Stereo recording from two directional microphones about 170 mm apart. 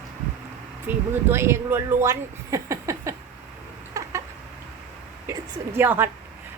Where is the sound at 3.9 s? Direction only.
20° right (ahead or behind).